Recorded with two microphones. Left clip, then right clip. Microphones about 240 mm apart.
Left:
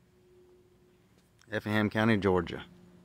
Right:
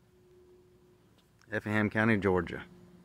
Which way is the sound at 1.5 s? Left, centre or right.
Centre.